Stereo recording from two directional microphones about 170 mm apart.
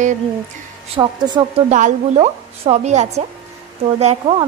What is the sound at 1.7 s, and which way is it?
A woman's voice, 45° right (ahead or behind).